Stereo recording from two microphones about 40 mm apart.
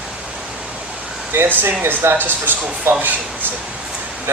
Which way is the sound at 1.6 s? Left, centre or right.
Right.